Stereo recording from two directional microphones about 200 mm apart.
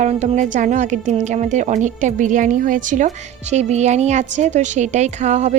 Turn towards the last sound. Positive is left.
turn(degrees=-35)  # may be behind; listen again after turning